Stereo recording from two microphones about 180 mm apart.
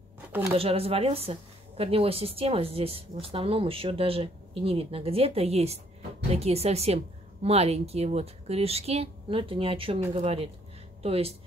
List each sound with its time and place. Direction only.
0.6 s a woman's voice: 35° right (ahead or behind)